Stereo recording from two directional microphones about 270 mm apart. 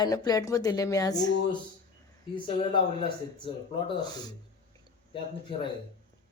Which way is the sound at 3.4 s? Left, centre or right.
Centre.